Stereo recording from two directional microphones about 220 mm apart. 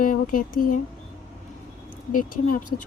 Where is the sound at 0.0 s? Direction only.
40° left (ahead or behind).